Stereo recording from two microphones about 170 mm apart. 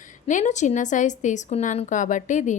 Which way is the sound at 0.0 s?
50° left (ahead or behind).